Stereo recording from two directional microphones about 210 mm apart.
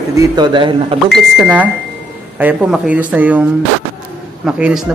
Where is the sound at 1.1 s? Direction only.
5° right (ahead or behind).